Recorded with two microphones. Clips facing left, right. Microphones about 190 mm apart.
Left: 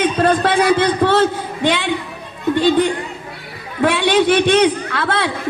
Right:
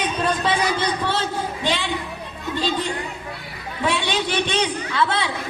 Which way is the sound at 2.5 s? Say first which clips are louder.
Left 10 dB; 55° left (ahead or behind).